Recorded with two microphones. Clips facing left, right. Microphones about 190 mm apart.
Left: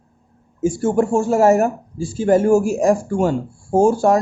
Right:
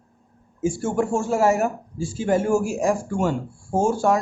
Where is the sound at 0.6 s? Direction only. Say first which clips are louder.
Left 5 dB; 40° left (ahead or behind).